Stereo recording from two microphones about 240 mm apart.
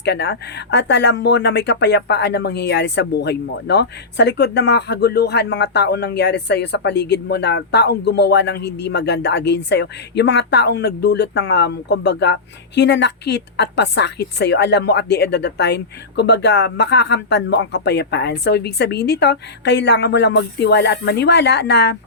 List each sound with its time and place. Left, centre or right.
0.0 s speech: left